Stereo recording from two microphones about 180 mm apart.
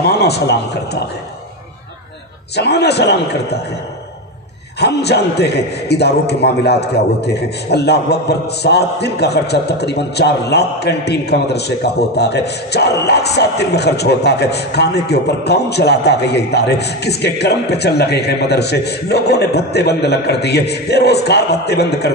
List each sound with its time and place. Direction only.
0.0 s a man's voice: 65° left (ahead or behind)
2.5 s a man's voice: 65° left (ahead or behind)
4.7 s a man's voice: 65° left (ahead or behind)